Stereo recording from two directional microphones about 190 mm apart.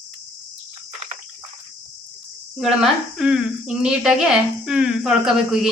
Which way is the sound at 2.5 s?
Centre (ahead or behind).